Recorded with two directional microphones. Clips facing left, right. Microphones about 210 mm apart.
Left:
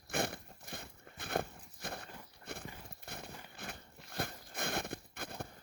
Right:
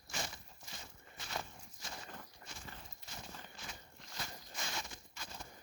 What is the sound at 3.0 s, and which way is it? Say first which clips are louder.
Clip-clop: left 6 dB; 60° left (ahead or behind).